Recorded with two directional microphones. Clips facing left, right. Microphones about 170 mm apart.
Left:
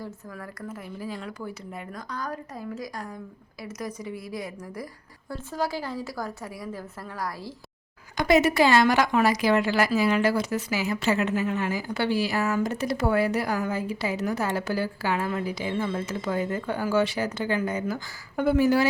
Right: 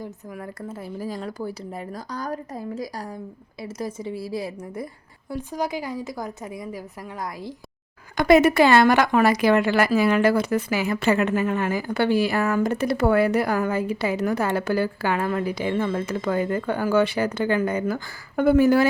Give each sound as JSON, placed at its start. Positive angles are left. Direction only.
{"t": 0.0, "sound": "a woman's voice", "side_deg": -20}
{"t": 0.9, "sound": "a woman's voice", "side_deg": -40}
{"t": 5.3, "sound": "a woman's voice", "side_deg": -15}
{"t": 8.1, "sound": "a woman's voice", "side_deg": -55}